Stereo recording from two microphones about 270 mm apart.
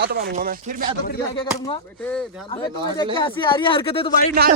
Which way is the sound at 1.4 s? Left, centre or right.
Centre.